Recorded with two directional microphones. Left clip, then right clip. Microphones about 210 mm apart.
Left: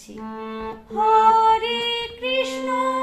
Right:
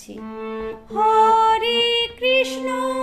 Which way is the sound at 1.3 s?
45° right (ahead or behind).